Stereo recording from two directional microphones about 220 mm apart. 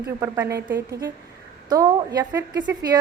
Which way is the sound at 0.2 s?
10° right (ahead or behind).